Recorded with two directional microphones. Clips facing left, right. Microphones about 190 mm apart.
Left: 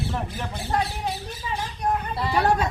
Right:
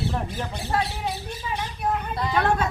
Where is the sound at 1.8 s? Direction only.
5° left (ahead or behind).